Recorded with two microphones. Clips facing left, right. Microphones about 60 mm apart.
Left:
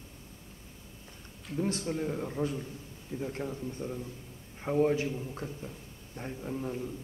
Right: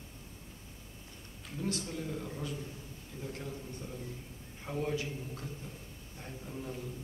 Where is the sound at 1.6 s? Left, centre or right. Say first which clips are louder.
Left 6 dB; left.